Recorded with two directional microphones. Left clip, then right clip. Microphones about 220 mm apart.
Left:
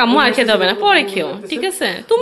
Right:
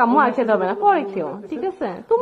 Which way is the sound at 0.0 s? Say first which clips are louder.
Left 3 dB; 15° left (ahead or behind).